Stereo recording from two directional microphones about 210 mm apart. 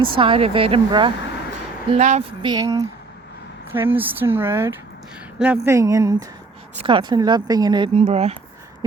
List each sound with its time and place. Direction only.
0.2 s speech: 25° right (ahead or behind)
1.9 s speech: 35° right (ahead or behind)
2.4 s speech: 20° right (ahead or behind)